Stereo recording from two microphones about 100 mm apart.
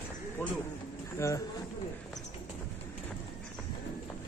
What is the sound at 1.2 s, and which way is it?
Speech, 30° left (ahead or behind).